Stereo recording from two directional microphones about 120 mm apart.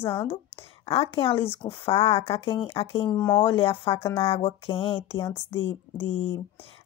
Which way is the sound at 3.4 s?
50° left (ahead or behind).